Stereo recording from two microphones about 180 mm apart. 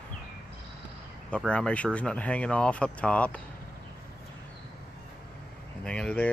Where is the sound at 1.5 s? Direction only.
5° left (ahead or behind).